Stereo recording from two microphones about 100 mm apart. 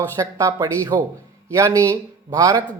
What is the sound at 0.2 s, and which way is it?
Speech, 35° right (ahead or behind).